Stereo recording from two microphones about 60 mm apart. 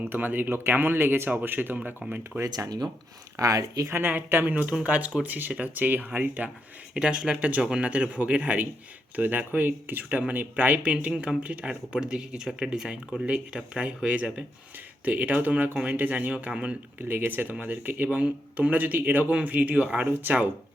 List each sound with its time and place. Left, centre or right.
0.0 s speech: right
2.4 s speech: right
3.3 s speech: right
3.9 s speech: right
6.9 s speech: centre
13.2 s speech: right
17.1 s speech: right